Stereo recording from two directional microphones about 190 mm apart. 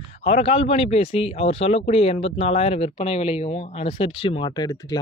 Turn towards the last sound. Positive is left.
turn(degrees=20)  # may be behind; listen again after turning